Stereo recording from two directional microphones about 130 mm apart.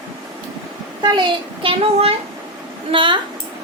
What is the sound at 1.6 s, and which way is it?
A woman's voice, 50° right (ahead or behind).